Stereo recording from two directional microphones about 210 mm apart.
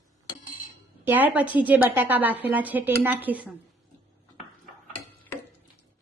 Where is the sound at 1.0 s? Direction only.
10° right (ahead or behind).